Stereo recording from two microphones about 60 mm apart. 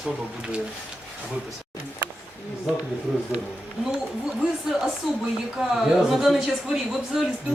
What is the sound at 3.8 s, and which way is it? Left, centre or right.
Speech, centre.